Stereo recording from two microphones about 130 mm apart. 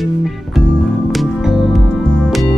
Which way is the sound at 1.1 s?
Centre (ahead or behind).